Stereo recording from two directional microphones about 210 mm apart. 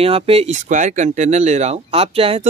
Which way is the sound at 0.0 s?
30° right (ahead or behind).